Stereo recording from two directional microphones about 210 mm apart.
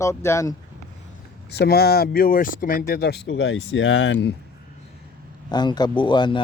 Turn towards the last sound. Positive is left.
turn(degrees=20)  # may be behind; listen again after turning